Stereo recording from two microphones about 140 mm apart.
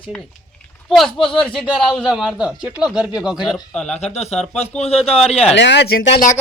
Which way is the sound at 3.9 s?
50° left (ahead or behind).